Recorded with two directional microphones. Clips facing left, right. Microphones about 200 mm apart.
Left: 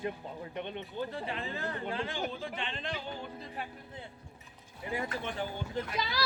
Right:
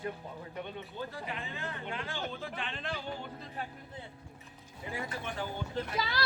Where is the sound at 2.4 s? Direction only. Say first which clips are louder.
Left 1 dB; 5° right (ahead or behind).